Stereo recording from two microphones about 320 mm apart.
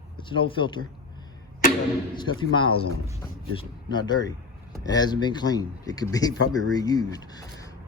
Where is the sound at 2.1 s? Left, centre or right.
Centre.